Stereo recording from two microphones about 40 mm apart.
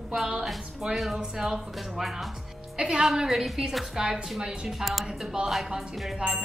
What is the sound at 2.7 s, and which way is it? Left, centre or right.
A woman's voice, right.